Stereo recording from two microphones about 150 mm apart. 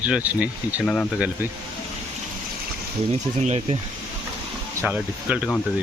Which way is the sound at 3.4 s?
50° right (ahead or behind).